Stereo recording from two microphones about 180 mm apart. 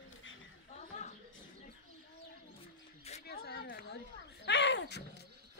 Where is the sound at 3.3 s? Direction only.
65° left (ahead or behind).